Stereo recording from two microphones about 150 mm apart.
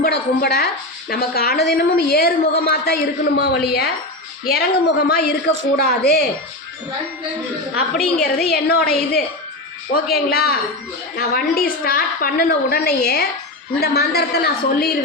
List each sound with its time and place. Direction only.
0.0 s a woman's voice: 90° left
8.2 s a woman's voice: 90° left
11.2 s a woman's voice: 75° left (ahead or behind)